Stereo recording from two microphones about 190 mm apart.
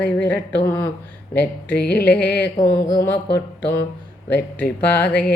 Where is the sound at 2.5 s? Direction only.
20° left (ahead or behind).